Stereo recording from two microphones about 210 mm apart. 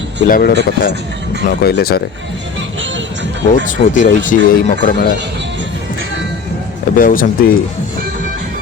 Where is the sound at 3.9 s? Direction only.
35° left (ahead or behind).